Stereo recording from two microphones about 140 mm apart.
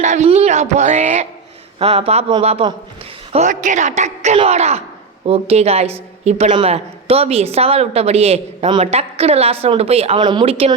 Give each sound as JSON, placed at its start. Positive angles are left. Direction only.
{"t": 0.0, "sound": "a sound", "side_deg": -55}
{"t": 0.3, "sound": "a woman's voice", "side_deg": -55}
{"t": 3.3, "sound": "a woman's voice", "side_deg": -65}